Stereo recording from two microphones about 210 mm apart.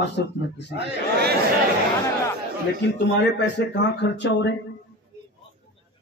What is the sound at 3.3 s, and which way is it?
A man's voice, 60° left (ahead or behind).